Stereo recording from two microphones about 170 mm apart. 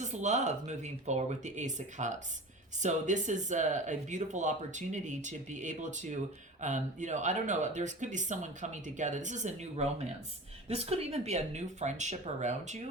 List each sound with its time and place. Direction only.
0.0 s speech: 45° right (ahead or behind)